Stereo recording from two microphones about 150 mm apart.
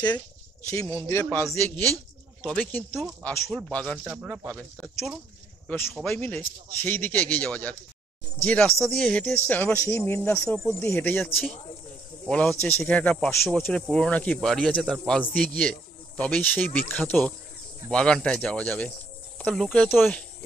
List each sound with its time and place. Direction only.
0.7 s speech: 20° left (ahead or behind)
3.4 s speech: centre (ahead or behind)
4.1 s speech: 10° right (ahead or behind)
4.5 s speech: 5° left (ahead or behind)
5.9 s speech: 5° left (ahead or behind)